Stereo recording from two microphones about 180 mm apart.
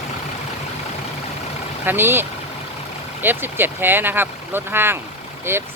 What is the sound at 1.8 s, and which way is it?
Speech, 10° right (ahead or behind).